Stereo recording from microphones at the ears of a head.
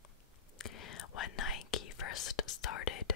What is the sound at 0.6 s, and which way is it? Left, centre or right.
Whispering, left.